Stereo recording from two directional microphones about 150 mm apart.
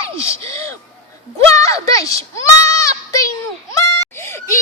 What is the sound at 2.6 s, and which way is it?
Goat, 20° left (ahead or behind).